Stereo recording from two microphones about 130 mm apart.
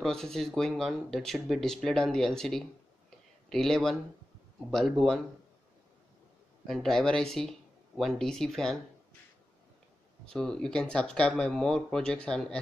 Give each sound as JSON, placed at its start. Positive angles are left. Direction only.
{"t": 0.0, "sound": "speech", "side_deg": 5}
{"t": 6.7, "sound": "speech", "side_deg": 0}
{"t": 10.2, "sound": "speech", "side_deg": 5}